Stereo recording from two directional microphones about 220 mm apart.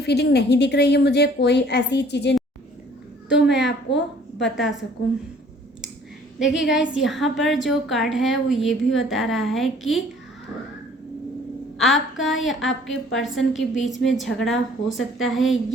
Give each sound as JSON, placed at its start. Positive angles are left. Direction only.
{"t": 0.0, "sound": "a woman's voice", "side_deg": 50}
{"t": 3.2, "sound": "a child's voice", "side_deg": -5}
{"t": 3.7, "sound": "a woman's voice", "side_deg": 50}
{"t": 4.5, "sound": "a woman's voice", "side_deg": 0}
{"t": 6.4, "sound": "a woman's voice", "side_deg": 0}
{"t": 11.8, "sound": "a woman's voice", "side_deg": 0}